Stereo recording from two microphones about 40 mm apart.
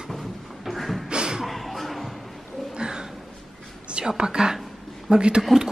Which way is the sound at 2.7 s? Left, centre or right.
Centre.